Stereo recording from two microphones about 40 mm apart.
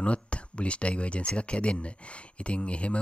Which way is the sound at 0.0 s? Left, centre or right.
Left.